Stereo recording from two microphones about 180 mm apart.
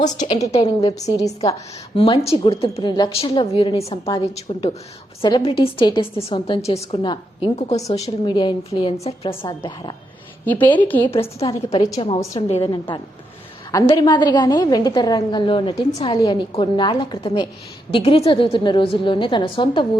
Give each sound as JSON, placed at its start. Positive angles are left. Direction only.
{"t": 0.0, "sound": "a woman's voice", "side_deg": 20}
{"t": 10.4, "sound": "a woman's voice", "side_deg": 10}
{"t": 11.0, "sound": "a woman's voice", "side_deg": 30}
{"t": 13.8, "sound": "a woman's voice", "side_deg": 25}